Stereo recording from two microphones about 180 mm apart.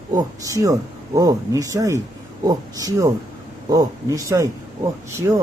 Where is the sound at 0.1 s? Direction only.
20° right (ahead or behind).